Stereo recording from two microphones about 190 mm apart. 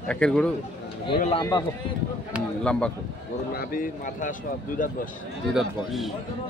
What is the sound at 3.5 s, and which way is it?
Speech, 50° left (ahead or behind).